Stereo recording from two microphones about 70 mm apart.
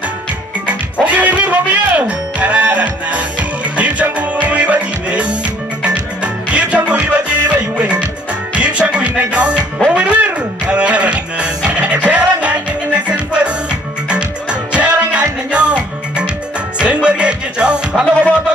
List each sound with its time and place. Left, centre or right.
1.0 s music: right